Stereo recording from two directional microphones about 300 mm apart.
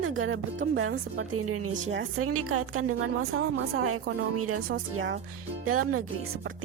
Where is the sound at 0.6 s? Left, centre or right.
Right.